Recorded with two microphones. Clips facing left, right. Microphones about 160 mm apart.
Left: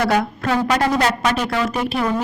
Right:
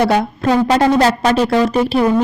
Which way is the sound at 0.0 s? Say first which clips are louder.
Right 4 dB; 25° right (ahead or behind).